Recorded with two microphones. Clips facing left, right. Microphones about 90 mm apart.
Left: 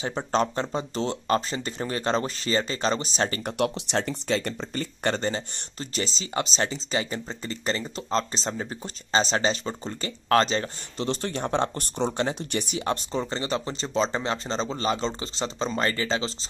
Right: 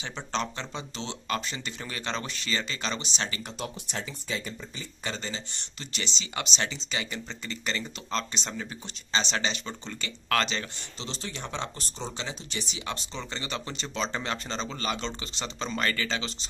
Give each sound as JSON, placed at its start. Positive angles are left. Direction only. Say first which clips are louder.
{"t": 0.0, "sound": "speech", "louder": "left 7 dB", "side_deg": 40}
{"t": 3.5, "sound": "speech", "louder": "left 10 dB", "side_deg": 70}
{"t": 11.0, "sound": "speech", "louder": "left 10 dB", "side_deg": 50}